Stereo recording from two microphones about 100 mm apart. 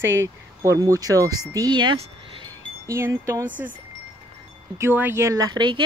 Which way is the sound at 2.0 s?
60° right (ahead or behind).